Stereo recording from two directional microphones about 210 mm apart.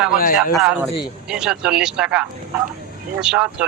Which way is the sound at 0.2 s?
40° left (ahead or behind).